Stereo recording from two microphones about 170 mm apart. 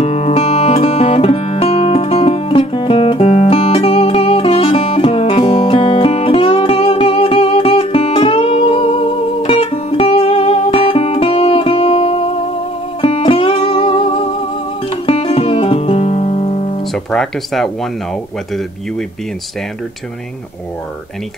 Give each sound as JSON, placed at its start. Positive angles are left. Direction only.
{"t": 0.0, "sound": "music", "side_deg": 35}
{"t": 16.8, "sound": "music", "side_deg": 0}